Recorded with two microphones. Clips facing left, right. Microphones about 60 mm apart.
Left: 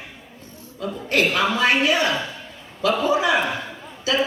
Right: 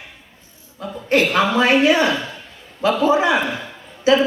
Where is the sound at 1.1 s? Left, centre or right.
Right.